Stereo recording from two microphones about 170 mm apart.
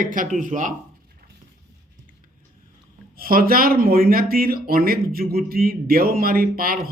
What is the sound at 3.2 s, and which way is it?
Speech, 60° right (ahead or behind).